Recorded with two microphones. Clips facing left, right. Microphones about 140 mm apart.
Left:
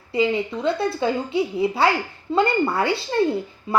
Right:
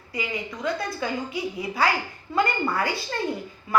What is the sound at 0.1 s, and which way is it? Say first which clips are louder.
A woman's voice: left 10 dB; 30° left (ahead or behind).